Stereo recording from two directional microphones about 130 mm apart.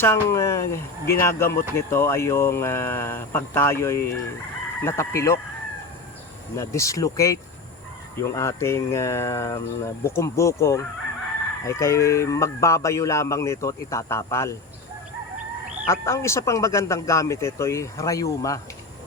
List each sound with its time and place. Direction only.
0.0 s speech: 20° left (ahead or behind)
6.6 s speech: 25° left (ahead or behind)
15.9 s speech: 20° left (ahead or behind)